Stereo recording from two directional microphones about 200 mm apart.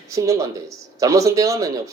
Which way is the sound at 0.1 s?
15° right (ahead or behind).